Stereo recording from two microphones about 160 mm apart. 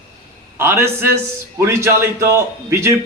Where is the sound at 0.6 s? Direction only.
15° right (ahead or behind).